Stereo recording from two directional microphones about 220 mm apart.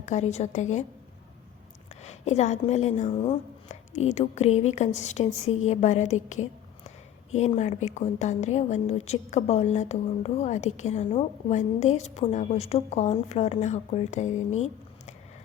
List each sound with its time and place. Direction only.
0.0 s speech: 30° left (ahead or behind)
2.0 s speech: 30° left (ahead or behind)